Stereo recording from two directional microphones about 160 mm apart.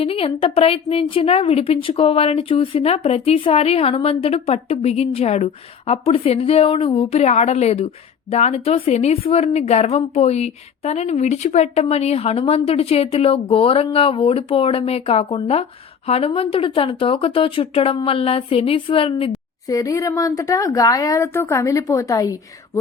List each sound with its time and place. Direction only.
0.0 s a woman's voice: 35° left (ahead or behind)
19.6 s speech: 20° left (ahead or behind)